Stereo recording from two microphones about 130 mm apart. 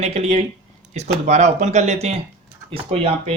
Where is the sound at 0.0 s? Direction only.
55° right (ahead or behind).